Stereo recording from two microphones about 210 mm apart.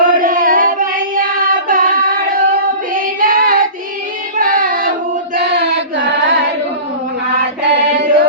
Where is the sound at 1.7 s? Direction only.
40° right (ahead or behind).